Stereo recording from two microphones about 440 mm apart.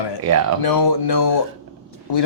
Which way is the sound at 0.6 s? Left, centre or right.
Left.